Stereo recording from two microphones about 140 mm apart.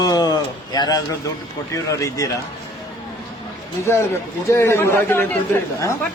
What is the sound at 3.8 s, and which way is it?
A man's voice, 20° left (ahead or behind).